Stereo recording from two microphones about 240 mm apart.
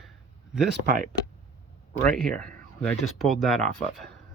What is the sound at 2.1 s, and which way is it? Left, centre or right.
Speech, centre.